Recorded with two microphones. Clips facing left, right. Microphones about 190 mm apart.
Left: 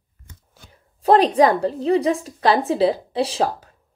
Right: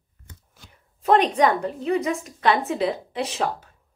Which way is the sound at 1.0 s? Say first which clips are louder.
Left 4 dB; 35° left (ahead or behind).